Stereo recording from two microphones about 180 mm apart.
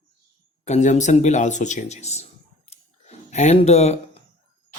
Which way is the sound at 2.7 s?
40° left (ahead or behind).